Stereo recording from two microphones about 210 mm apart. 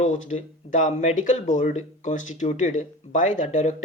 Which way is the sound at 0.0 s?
30° left (ahead or behind).